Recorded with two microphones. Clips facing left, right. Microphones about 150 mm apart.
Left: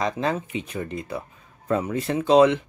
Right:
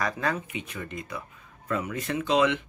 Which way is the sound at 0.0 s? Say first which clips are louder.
Left 4 dB; 25° left (ahead or behind).